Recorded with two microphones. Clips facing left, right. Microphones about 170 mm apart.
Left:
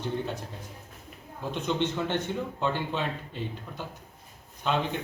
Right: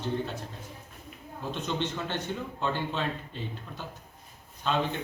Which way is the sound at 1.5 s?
15° left (ahead or behind).